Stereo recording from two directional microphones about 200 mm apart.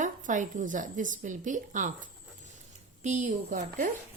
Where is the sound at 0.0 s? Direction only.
40° right (ahead or behind).